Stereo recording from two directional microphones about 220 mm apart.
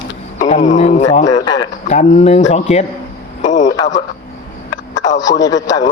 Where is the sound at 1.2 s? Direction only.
15° left (ahead or behind).